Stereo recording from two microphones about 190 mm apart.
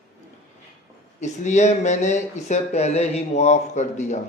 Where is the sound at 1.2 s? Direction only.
40° left (ahead or behind).